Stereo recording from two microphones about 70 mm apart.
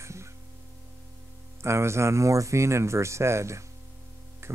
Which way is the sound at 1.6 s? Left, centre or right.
Right.